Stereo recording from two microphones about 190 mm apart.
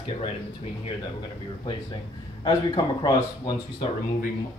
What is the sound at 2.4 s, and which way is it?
Speech, 25° left (ahead or behind).